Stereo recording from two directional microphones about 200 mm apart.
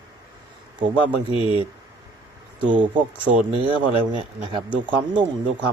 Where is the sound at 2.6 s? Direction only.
25° right (ahead or behind).